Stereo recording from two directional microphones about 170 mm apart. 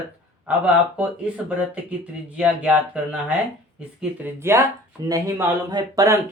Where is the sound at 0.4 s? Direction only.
5° right (ahead or behind).